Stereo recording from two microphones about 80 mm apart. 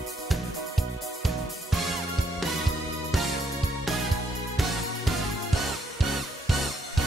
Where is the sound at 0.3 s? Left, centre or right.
Centre.